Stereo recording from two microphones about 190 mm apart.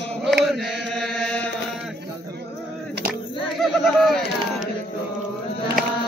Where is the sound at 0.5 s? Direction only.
Centre (ahead or behind).